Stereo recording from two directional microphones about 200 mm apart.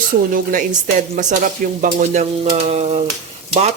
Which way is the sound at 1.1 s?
40° right (ahead or behind).